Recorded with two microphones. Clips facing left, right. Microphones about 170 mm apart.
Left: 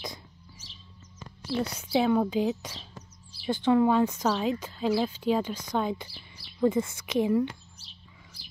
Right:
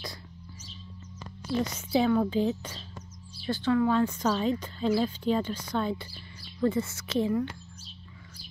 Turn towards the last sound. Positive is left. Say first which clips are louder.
# left 2 dB
turn(degrees=15)  # may be behind; listen again after turning